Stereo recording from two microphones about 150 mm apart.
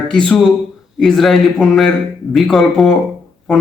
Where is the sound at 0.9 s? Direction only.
5° left (ahead or behind).